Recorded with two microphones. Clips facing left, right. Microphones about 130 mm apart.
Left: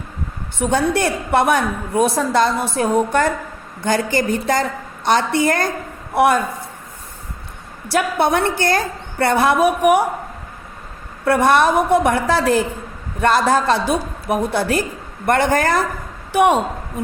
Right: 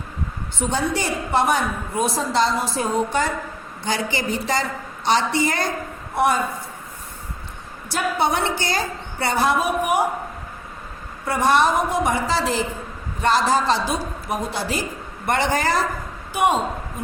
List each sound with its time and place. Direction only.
0.6 s a woman's voice: 55° left (ahead or behind)
6.1 s a man's voice: 65° left (ahead or behind)
7.9 s a woman's voice: 60° left (ahead or behind)
11.3 s a woman's voice: 60° left (ahead or behind)
16.3 s a woman's voice: 65° left (ahead or behind)